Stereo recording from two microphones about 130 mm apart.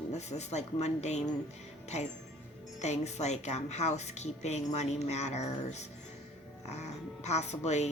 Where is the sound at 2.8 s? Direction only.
60° left (ahead or behind).